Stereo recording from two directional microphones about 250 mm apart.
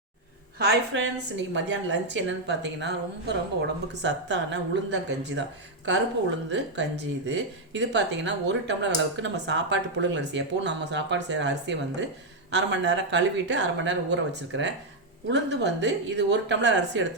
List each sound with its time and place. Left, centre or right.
0.9 s speech: right